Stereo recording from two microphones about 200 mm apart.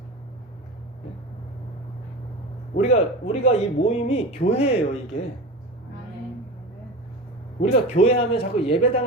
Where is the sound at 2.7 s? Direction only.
35° left (ahead or behind).